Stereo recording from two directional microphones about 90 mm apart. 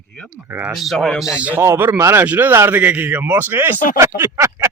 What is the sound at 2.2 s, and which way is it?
A man's voice, 20° right (ahead or behind).